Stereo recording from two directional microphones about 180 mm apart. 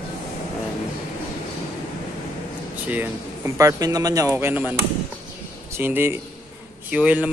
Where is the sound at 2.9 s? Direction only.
10° right (ahead or behind).